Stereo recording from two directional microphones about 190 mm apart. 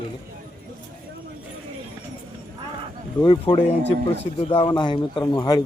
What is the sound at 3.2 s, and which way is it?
A man's voice, 25° left (ahead or behind).